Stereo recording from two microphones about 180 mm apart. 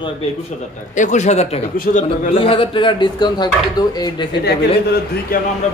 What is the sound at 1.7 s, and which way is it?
Speech, 50° left (ahead or behind).